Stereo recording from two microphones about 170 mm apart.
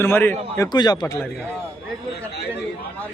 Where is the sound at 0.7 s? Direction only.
25° left (ahead or behind).